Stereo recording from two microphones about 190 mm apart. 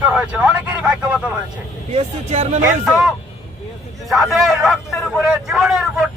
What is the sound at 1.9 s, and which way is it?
Speech, 35° right (ahead or behind).